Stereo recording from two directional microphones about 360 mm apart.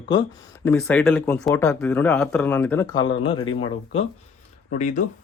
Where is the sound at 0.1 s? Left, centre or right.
Centre.